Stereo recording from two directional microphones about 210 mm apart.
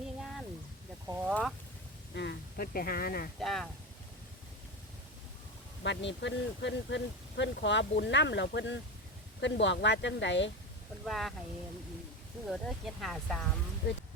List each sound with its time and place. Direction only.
1.0 s speech: 10° right (ahead or behind)
2.1 s speech: 50° left (ahead or behind)
3.4 s speech: centre (ahead or behind)
5.8 s speech: 60° left (ahead or behind)
11.0 s speech: centre (ahead or behind)
12.5 s speech: centre (ahead or behind)